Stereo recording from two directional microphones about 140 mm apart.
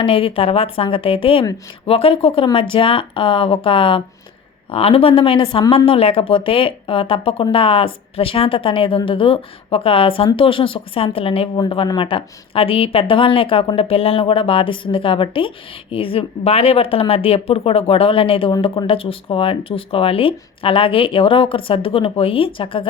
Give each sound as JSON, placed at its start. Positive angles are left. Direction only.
{"t": 0.0, "sound": "a woman's voice", "side_deg": 40}